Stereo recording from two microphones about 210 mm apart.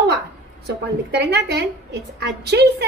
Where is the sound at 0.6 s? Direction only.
50° right (ahead or behind).